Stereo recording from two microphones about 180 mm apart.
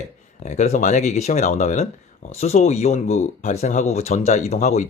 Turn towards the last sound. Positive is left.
turn(degrees=40)  # may be behind; listen again after turning